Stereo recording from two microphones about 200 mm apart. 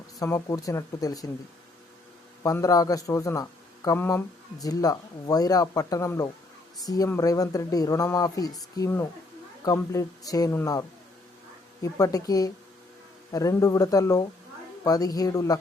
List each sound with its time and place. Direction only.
0.2 s speech: 15° left (ahead or behind)
2.4 s speech: 15° left (ahead or behind)